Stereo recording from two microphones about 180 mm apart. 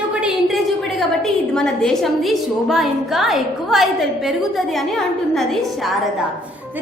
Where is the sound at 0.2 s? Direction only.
Centre (ahead or behind).